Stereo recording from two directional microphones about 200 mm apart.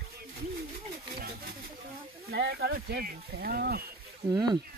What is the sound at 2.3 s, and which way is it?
Speech, 55° right (ahead or behind).